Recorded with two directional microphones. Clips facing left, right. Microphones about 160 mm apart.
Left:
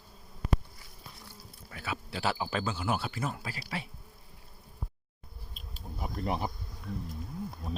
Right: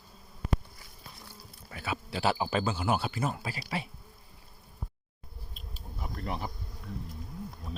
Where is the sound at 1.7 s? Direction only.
15° right (ahead or behind).